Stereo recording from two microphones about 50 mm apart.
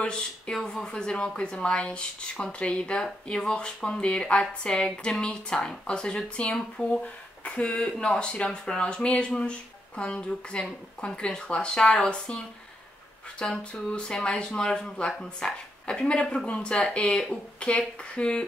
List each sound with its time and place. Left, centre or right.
0.0 s speech: centre